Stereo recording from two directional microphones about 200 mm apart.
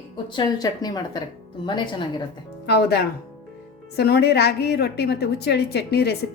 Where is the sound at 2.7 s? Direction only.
55° left (ahead or behind).